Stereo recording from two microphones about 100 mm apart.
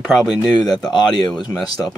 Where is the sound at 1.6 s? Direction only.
40° left (ahead or behind).